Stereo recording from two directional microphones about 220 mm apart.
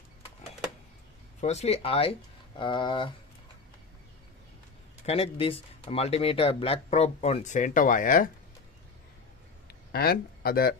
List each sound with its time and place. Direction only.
1.4 s speech: 30° left (ahead or behind)
5.0 s speech: 25° left (ahead or behind)
9.9 s speech: 45° left (ahead or behind)